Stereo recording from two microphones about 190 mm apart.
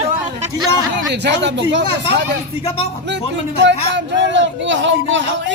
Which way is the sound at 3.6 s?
70° right (ahead or behind).